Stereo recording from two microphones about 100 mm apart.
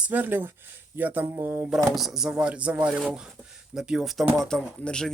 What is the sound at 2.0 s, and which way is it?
Speech, 5° right (ahead or behind).